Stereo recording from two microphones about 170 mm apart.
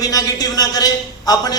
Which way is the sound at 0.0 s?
20° left (ahead or behind).